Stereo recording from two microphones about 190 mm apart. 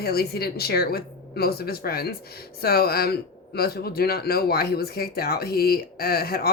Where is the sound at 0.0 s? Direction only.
55° left (ahead or behind).